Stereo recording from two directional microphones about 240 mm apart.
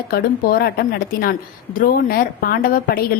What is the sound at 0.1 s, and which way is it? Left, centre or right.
A woman's voice, left.